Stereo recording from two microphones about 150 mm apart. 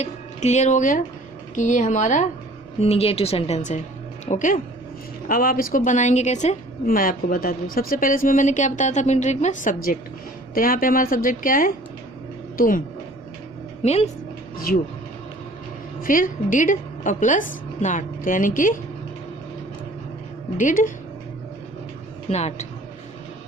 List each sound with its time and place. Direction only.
0.0 s a woman's voice: 50° left (ahead or behind)
2.8 s a woman's voice: 40° left (ahead or behind); by 4.6 s 60° left (ahead or behind)
5.3 s a woman's voice: 70° left (ahead or behind)
13.8 s a woman's voice: 45° left (ahead or behind)
14.7 s a woman's voice: 70° left (ahead or behind)
16.0 s a woman's voice: 65° left (ahead or behind)
20.6 s a woman's voice: 60° left (ahead or behind)
22.3 s a woman's voice: 45° left (ahead or behind)